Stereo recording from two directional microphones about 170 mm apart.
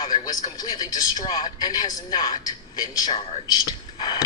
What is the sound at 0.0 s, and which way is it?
A man's voice, 25° left (ahead or behind).